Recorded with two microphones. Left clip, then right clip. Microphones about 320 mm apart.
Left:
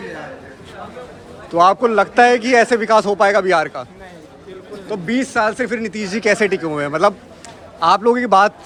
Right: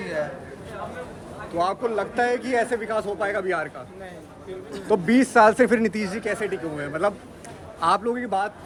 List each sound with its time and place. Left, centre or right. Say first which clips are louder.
1.5 s a man's voice: left 12 dB; centre
4.9 s a man's voice: right 1 dB; centre